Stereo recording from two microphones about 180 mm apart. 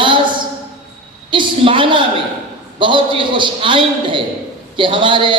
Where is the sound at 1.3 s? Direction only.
25° right (ahead or behind).